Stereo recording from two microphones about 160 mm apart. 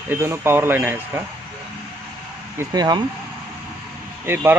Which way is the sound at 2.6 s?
25° right (ahead or behind).